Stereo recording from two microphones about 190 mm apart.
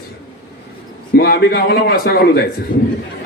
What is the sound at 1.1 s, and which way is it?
Speech, 55° left (ahead or behind).